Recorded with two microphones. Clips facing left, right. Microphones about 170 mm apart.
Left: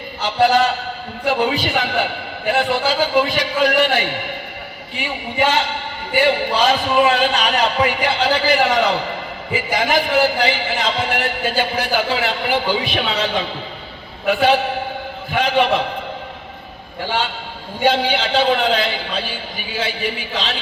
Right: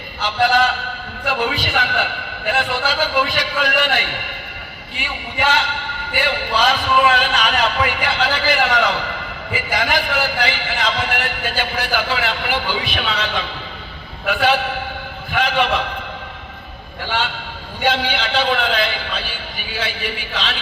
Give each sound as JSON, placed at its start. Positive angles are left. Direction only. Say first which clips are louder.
{"t": 0.3, "sound": "speech", "louder": "left 2 dB", "side_deg": 35}
{"t": 5.4, "sound": "speech", "louder": "left 2 dB", "side_deg": 30}
{"t": 17.8, "sound": "speech", "louder": "left 3 dB", "side_deg": 35}